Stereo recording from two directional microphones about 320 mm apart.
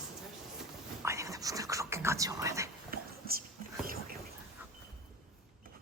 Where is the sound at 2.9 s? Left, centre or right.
Right.